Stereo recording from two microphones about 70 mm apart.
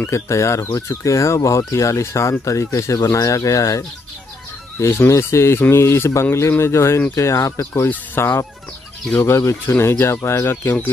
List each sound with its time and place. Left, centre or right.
0.0 s speech: left
4.7 s speech: left
8.2 s speech: left